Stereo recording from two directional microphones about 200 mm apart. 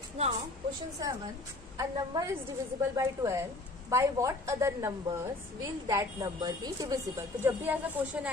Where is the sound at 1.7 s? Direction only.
20° right (ahead or behind).